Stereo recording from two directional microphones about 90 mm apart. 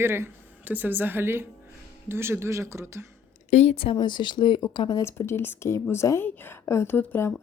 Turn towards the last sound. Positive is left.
turn(degrees=25)  # may be behind; listen again after turning